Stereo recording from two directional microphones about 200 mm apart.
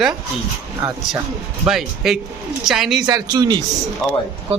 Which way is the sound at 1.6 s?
Centre (ahead or behind).